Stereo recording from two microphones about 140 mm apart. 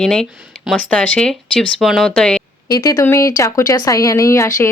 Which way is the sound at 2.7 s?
25° left (ahead or behind).